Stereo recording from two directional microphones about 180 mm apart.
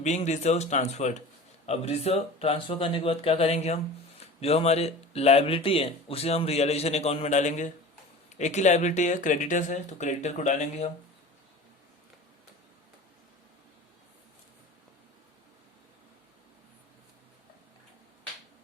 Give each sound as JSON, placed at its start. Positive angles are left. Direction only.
{"t": 0.0, "sound": "speech", "side_deg": 40}